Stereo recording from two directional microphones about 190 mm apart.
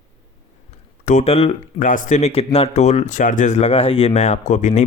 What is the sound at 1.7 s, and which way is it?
Speech, 45° left (ahead or behind).